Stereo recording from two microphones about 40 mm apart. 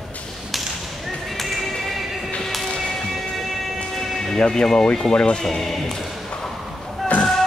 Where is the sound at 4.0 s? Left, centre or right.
Centre.